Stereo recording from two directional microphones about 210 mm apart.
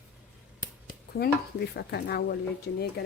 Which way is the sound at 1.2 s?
50° left (ahead or behind).